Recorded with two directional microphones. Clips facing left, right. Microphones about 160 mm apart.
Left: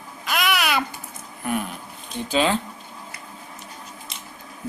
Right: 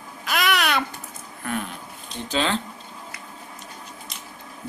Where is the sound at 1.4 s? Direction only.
10° left (ahead or behind).